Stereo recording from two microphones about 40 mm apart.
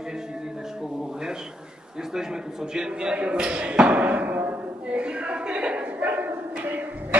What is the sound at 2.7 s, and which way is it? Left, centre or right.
Speech, centre.